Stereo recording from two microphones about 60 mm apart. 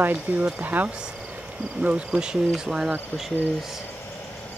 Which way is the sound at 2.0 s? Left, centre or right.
Centre.